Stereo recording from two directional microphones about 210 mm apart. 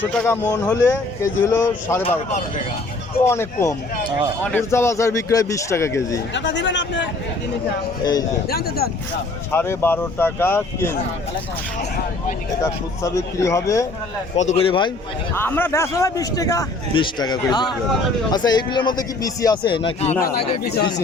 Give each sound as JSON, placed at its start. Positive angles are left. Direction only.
{"t": 0.0, "sound": "a man's voice", "side_deg": 5}
{"t": 2.0, "sound": "speech", "side_deg": 35}
{"t": 3.2, "sound": "a man's voice", "side_deg": 15}
{"t": 6.3, "sound": "speech", "side_deg": 60}
{"t": 8.4, "sound": "speech", "side_deg": 45}
{"t": 9.5, "sound": "a man's voice", "side_deg": 10}
{"t": 12.6, "sound": "a man's voice", "side_deg": 15}
{"t": 14.3, "sound": "a man's voice", "side_deg": 30}
{"t": 15.4, "sound": "a man's voice", "side_deg": 10}